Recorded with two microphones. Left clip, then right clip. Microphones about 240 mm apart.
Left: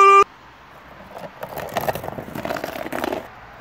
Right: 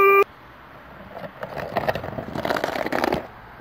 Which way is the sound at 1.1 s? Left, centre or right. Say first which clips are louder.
Left 1 dB; centre.